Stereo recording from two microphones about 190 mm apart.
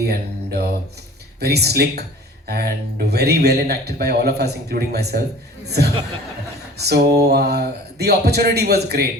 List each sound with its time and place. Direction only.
0.0 s mantra: 55° right (ahead or behind)
1.4 s speech: 60° right (ahead or behind)